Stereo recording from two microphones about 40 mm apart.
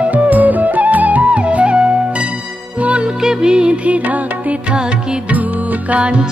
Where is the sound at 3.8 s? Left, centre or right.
Right.